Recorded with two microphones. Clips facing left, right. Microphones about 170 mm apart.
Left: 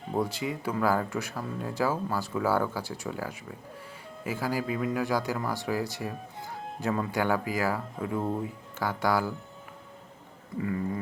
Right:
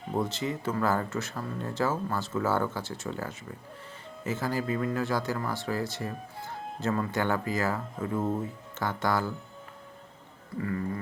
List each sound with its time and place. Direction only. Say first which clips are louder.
0.1 s speech: even; 10° left (ahead or behind)
8.0 s speech: even; 5° right (ahead or behind)
8.8 s speech: left 1 dB; 10° left (ahead or behind)
10.6 s speech: left 1 dB; 15° left (ahead or behind)